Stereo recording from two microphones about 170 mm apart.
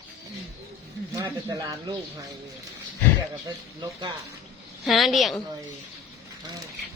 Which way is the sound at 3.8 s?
25° right (ahead or behind).